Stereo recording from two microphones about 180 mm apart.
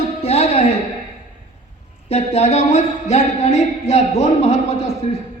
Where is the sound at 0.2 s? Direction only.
35° left (ahead or behind).